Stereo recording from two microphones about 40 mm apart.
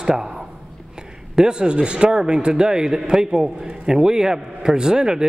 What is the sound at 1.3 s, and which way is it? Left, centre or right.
A man's voice, centre.